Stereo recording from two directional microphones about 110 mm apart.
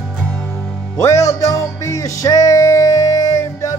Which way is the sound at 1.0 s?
30° left (ahead or behind).